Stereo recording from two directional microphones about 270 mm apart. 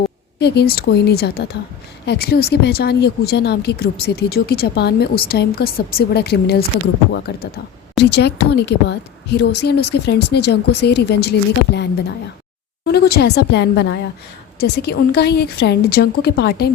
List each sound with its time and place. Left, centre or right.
0.3 s a woman's voice: left